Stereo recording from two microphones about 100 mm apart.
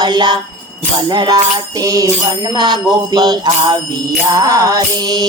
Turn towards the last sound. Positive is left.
turn(degrees=-45)  # may be behind; listen again after turning